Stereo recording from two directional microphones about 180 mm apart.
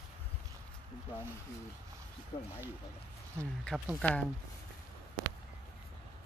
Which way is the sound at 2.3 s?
30° left (ahead or behind).